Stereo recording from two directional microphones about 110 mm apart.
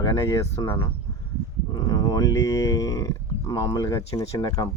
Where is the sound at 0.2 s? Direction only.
30° left (ahead or behind).